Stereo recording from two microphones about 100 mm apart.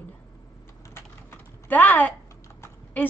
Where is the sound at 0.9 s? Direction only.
20° left (ahead or behind).